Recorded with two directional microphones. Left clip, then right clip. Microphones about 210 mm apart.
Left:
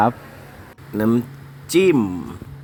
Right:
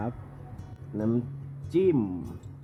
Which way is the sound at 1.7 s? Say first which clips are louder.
Left 9 dB; 15° left (ahead or behind).